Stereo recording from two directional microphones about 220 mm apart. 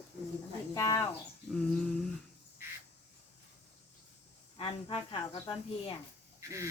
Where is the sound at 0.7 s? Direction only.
15° left (ahead or behind).